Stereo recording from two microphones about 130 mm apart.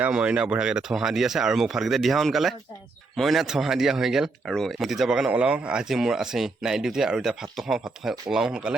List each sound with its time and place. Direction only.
0.0 s speech: 10° right (ahead or behind)